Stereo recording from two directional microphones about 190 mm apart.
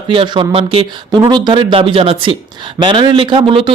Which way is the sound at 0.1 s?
25° right (ahead or behind).